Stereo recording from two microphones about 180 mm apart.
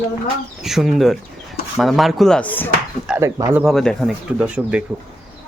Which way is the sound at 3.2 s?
20° right (ahead or behind).